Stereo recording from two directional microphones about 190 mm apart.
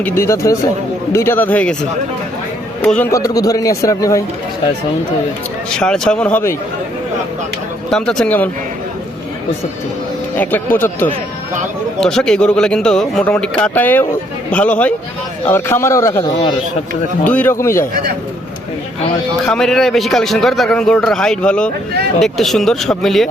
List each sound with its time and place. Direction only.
0.0 s a man's voice: 15° left (ahead or behind)
3.1 s a man's voice: 20° left (ahead or behind)
5.7 s a man's voice: 5° left (ahead or behind)
7.9 s a man's voice: 5° left (ahead or behind)
10.3 s a man's voice: 10° left (ahead or behind)
17.2 s a man's voice: 10° left (ahead or behind)
19.5 s a man's voice: centre (ahead or behind)